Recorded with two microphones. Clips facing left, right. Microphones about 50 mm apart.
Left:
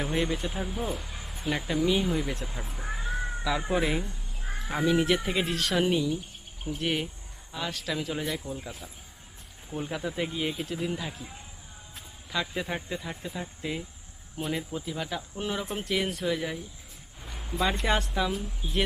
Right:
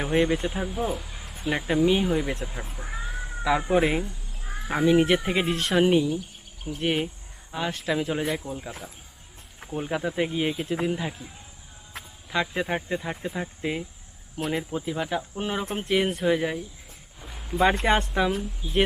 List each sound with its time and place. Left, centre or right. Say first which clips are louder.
0.0 s speech: right 6 dB; centre
1.5 s speech: right 4 dB; centre
3.7 s speech: right 5 dB; centre
8.4 s speech: right 2 dB; centre
9.7 s speech: right 5 dB; centre
11.1 s speech: even; centre
12.3 s speech: right 5 dB; right
17.2 s a sound: right 4 dB; centre
17.6 s speech: right 6 dB; right
18.6 s speech: right 5 dB; centre